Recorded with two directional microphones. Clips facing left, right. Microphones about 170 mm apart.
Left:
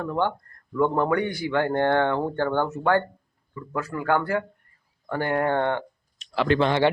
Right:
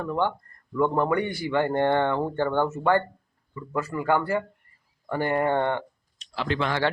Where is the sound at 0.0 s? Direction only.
5° right (ahead or behind).